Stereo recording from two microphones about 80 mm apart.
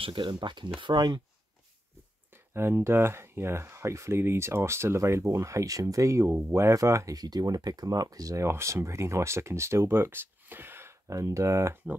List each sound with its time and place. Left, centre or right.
0.1 s speech: right
0.7 s speech: right
2.3 s speech: right
7.2 s speech: right
8.5 s speech: right